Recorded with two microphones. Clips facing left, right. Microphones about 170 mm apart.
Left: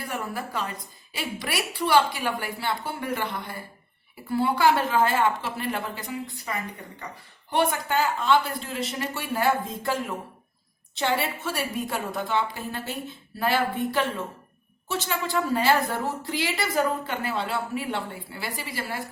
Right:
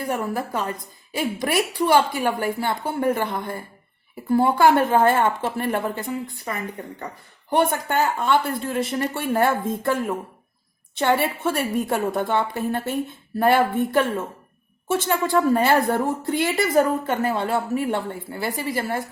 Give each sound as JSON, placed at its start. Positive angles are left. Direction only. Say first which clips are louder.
{"t": 0.3, "sound": "a woman's voice", "louder": "right 5 dB", "side_deg": -45}